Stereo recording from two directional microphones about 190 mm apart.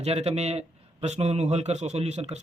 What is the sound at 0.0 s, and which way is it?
A man's voice, 35° right (ahead or behind).